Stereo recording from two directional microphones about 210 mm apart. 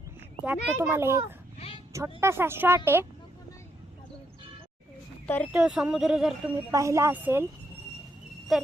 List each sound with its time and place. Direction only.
0.4 s speech: 10° right (ahead or behind)
1.5 s a sound: 30° left (ahead or behind)
1.9 s speech: 15° right (ahead or behind)
5.2 s speech: 5° left (ahead or behind)
5.5 s speech: 5° right (ahead or behind)
6.7 s speech: 15° right (ahead or behind)
8.5 s speech: centre (ahead or behind)